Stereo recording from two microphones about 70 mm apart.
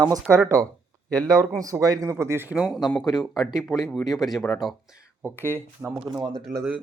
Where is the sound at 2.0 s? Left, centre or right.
Right.